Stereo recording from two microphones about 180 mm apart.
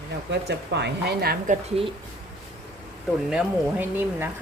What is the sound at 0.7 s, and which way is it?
Speech, 70° right (ahead or behind).